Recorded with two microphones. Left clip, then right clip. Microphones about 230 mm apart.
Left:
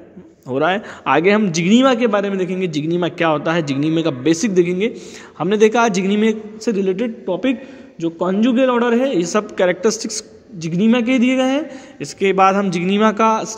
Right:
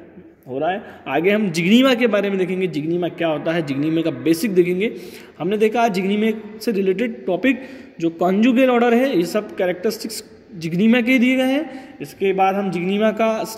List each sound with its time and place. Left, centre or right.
0.5 s a man's voice: left; by 2.8 s centre
2.9 s a man's voice: centre
12.0 s a man's voice: left